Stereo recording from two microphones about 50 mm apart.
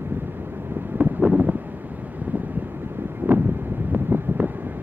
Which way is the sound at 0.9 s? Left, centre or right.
Right.